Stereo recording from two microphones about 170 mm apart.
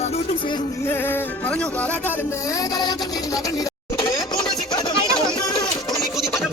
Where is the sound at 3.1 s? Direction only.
20° left (ahead or behind).